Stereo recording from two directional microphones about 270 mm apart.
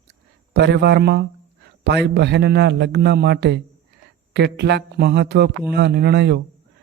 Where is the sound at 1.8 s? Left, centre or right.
Right.